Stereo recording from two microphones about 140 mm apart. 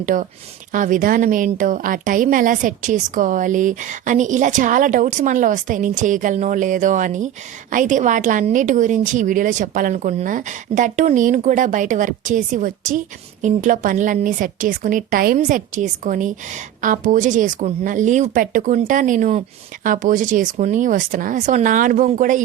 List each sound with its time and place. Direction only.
0.0 s a woman's voice: 65° right (ahead or behind)